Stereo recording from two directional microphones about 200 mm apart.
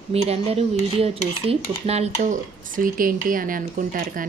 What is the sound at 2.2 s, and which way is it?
Speech, 40° right (ahead or behind).